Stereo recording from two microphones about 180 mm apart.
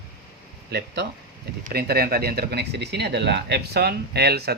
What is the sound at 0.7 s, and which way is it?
Speech, 65° right (ahead or behind).